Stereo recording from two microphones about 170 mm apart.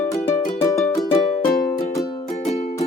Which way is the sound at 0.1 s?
15° left (ahead or behind).